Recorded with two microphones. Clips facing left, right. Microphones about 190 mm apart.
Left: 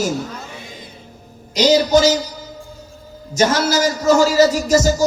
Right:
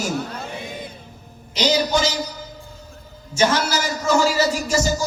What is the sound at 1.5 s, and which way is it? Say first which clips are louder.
Speech: left 6 dB; 40° left (ahead or behind).